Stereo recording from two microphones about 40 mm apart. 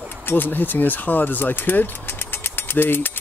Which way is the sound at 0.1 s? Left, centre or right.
Left.